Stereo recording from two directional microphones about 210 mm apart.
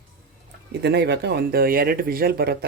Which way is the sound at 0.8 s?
50° right (ahead or behind).